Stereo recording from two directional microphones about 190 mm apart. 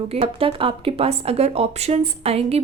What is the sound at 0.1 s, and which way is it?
A woman's voice, 30° right (ahead or behind).